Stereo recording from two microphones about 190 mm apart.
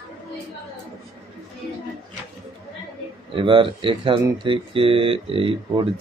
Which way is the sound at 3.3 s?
25° right (ahead or behind).